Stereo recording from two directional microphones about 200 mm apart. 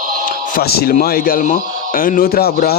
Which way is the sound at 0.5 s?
50° left (ahead or behind).